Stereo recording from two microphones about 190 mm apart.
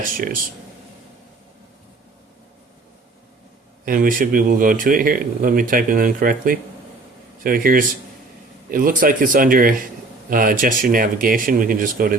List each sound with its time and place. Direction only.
0.0 s speech: 50° right (ahead or behind)
3.8 s speech: 45° right (ahead or behind)